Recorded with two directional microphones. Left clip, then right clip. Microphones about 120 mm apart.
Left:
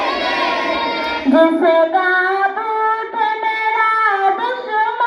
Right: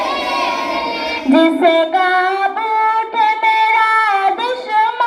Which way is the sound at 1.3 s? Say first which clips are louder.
Right 1 dB; 45° right (ahead or behind).